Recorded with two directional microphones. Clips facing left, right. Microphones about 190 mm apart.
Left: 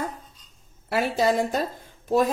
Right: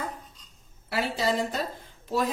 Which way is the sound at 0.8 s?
50° left (ahead or behind).